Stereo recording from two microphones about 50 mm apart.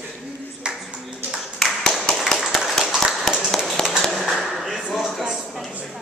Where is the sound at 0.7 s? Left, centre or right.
Centre.